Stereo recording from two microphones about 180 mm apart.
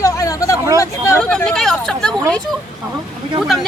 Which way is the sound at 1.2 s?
5° left (ahead or behind).